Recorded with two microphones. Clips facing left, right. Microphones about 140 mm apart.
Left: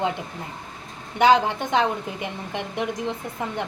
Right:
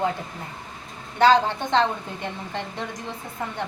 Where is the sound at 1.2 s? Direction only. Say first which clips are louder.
Even; 15° left (ahead or behind).